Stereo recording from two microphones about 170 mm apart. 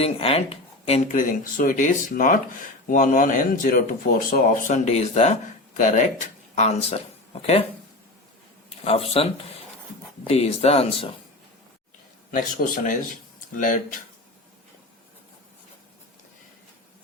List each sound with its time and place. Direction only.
0.0 s speech: 35° left (ahead or behind)
1.1 s speech: 55° left (ahead or behind)
4.7 s speech: 40° left (ahead or behind)
8.8 s speech: 35° left (ahead or behind)
12.3 s speech: 55° left (ahead or behind)